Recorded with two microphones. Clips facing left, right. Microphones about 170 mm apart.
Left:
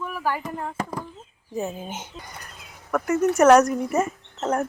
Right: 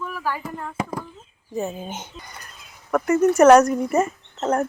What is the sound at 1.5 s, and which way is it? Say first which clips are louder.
Speech: right 2 dB; 5° left (ahead or behind).